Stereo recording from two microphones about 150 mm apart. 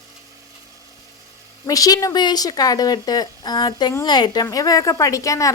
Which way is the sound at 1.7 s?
25° left (ahead or behind).